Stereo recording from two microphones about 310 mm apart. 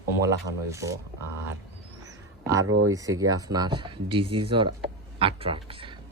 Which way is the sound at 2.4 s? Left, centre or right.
Centre.